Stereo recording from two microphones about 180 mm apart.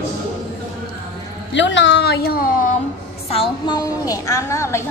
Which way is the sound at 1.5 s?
85° left.